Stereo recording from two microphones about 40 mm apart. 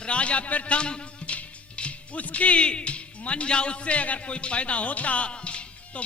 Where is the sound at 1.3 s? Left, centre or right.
Left.